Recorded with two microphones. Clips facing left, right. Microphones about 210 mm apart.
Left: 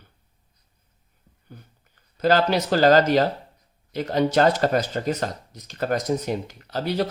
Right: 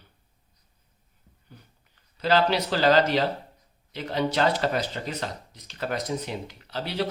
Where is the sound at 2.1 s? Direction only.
45° left (ahead or behind).